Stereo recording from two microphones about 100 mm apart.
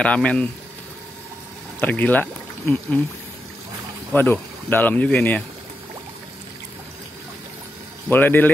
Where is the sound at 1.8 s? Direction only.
15° left (ahead or behind).